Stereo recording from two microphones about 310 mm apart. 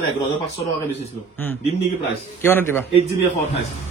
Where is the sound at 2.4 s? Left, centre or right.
Centre.